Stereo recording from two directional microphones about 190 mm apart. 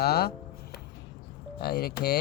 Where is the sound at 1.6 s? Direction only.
55° left (ahead or behind).